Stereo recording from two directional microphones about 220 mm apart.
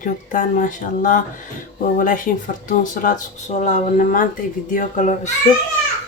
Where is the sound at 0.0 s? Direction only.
35° left (ahead or behind).